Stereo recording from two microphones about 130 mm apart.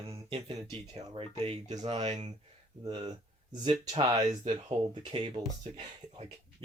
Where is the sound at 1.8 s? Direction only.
50° right (ahead or behind).